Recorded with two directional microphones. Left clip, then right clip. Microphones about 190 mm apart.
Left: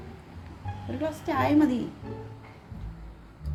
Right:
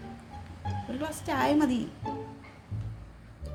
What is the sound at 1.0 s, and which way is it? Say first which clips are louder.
Speech: left 2 dB; 15° right (ahead or behind).